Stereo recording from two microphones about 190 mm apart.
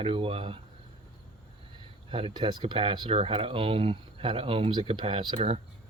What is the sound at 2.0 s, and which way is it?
Speech, 30° right (ahead or behind).